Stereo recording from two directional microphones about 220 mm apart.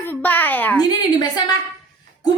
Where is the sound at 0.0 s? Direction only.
10° left (ahead or behind).